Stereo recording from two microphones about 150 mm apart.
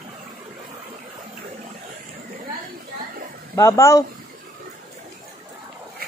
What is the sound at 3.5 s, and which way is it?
Speech, 20° left (ahead or behind).